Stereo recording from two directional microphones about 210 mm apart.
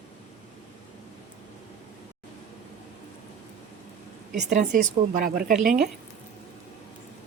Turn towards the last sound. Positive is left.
turn(degrees=-40)  # may be behind; listen again after turning